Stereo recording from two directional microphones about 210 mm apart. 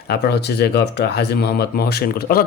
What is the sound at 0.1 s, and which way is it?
Speech, 50° left (ahead or behind).